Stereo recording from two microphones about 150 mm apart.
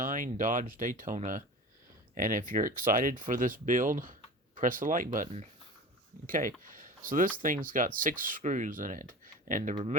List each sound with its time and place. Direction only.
0.0 s speech: 60° right (ahead or behind)